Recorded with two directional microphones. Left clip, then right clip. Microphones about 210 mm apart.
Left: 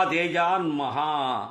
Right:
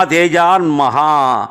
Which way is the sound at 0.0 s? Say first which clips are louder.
Right 12 dB; 35° right (ahead or behind).